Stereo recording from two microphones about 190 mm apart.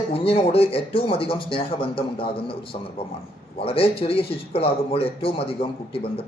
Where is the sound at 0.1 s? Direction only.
30° left (ahead or behind).